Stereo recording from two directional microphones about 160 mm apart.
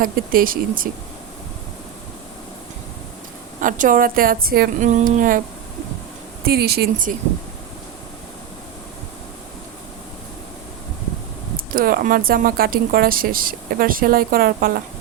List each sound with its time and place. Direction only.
0.0 s speech: 65° right (ahead or behind)
3.6 s speech: 55° right (ahead or behind); by 4.7 s 70° right (ahead or behind)
4.8 s speech: 50° right (ahead or behind)
6.4 s speech: 75° right (ahead or behind)
11.5 s speech: 60° right (ahead or behind)